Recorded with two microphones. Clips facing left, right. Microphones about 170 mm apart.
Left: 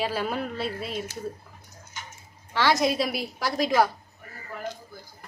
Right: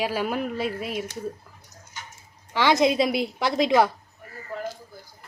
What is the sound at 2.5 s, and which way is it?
A woman's voice, 15° right (ahead or behind).